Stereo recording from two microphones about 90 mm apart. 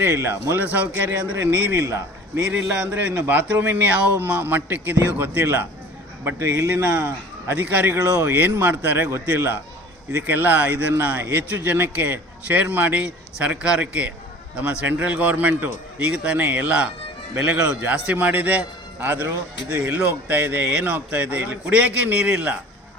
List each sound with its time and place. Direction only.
0.0 s a man's voice: 25° right (ahead or behind)
1.8 s a man's voice: 35° right (ahead or behind)
2.5 s a man's voice: 20° right (ahead or behind)